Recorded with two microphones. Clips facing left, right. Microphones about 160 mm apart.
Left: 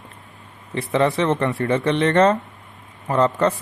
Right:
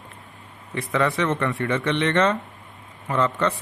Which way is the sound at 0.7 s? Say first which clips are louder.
Left 4 dB; 30° left (ahead or behind).